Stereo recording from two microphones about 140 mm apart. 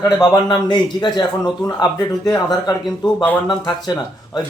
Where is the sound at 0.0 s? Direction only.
30° left (ahead or behind).